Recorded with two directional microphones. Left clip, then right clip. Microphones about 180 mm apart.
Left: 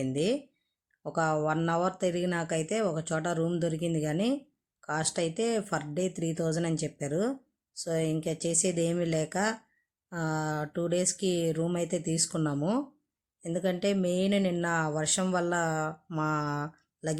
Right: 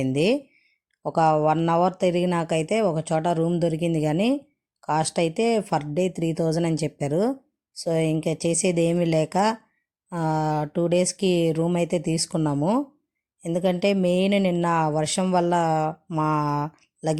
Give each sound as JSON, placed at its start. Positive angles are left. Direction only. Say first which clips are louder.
{"t": 0.0, "sound": "speech", "louder": "right 7 dB", "side_deg": -30}